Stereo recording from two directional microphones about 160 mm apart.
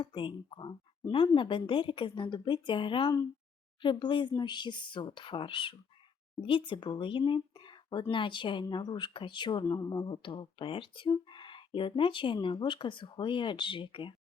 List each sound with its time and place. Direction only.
0.0 s speech: 30° left (ahead or behind)